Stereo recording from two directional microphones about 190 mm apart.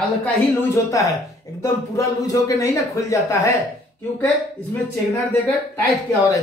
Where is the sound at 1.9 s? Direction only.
15° left (ahead or behind).